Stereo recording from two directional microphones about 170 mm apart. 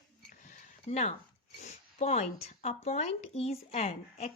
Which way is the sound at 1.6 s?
40° left (ahead or behind).